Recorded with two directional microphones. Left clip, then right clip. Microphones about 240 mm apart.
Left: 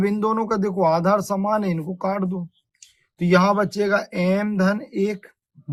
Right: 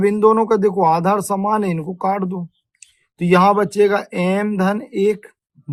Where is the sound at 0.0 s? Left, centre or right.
Right.